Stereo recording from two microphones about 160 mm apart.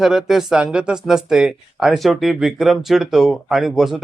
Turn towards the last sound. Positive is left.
turn(degrees=0)  # may be behind; listen again after turning